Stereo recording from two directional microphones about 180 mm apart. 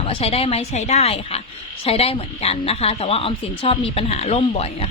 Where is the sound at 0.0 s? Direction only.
30° left (ahead or behind).